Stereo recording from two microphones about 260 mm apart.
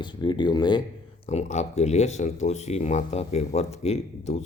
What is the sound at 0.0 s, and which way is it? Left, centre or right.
Speech, centre.